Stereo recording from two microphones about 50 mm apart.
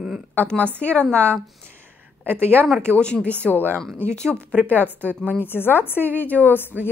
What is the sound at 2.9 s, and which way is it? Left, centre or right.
Speech, left.